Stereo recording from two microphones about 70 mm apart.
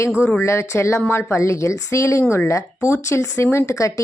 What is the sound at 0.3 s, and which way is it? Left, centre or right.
A woman's voice, left.